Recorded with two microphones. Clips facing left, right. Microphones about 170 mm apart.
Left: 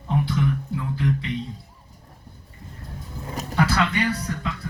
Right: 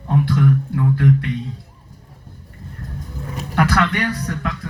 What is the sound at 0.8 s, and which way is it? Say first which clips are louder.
Speech: right 8 dB; 65° right (ahead or behind).